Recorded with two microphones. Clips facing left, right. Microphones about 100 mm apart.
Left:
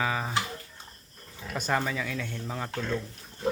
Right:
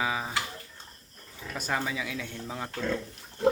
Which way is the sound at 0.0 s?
10° right (ahead or behind).